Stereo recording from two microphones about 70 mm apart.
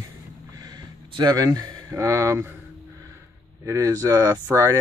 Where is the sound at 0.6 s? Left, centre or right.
Right.